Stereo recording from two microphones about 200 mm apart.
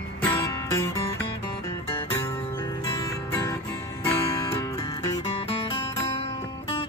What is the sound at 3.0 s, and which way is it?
Music, 15° left (ahead or behind).